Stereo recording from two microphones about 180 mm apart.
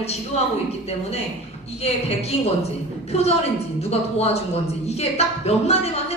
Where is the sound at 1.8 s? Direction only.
35° left (ahead or behind).